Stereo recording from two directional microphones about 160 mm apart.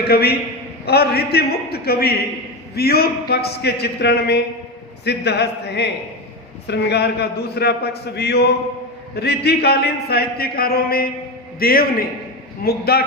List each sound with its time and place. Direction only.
0.1 s a man's voice: 80° left